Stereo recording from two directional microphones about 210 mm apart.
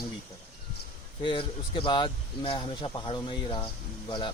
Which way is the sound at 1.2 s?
25° left (ahead or behind).